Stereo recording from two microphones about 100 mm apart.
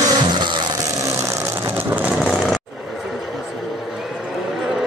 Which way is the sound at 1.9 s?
15° right (ahead or behind).